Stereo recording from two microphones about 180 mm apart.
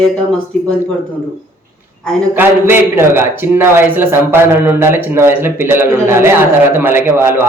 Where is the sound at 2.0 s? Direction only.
5° left (ahead or behind).